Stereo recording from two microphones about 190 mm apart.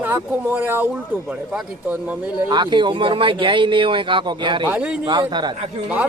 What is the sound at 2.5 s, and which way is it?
Speech, 25° right (ahead or behind).